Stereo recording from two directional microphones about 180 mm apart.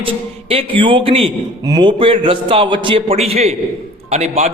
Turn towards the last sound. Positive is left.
turn(degrees=-35)  # may be behind; listen again after turning